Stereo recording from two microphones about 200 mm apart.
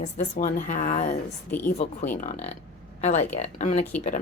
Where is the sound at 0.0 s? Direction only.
40° left (ahead or behind).